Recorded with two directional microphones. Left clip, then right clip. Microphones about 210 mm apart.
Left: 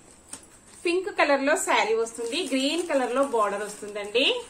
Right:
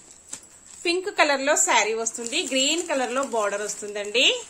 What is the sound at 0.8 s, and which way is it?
Speech, 40° right (ahead or behind).